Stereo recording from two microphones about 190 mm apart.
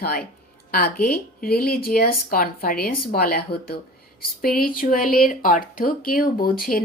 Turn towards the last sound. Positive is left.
turn(degrees=50)  # may be behind; listen again after turning